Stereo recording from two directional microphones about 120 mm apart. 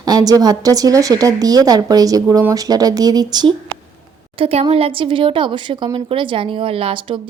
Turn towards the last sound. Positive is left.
turn(degrees=-50)  # may be behind; listen again after turning